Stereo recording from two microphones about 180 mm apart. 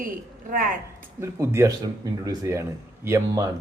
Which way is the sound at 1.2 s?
15° right (ahead or behind).